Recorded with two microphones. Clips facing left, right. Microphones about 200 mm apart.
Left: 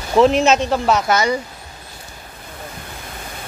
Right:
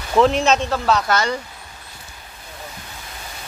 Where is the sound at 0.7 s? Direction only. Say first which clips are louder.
Left 2 dB; 20° left (ahead or behind).